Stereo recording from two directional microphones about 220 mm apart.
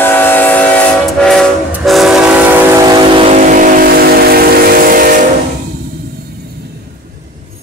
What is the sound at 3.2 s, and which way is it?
Vehicle, 35° right (ahead or behind).